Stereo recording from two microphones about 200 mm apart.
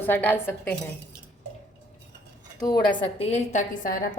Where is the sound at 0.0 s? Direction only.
10° left (ahead or behind).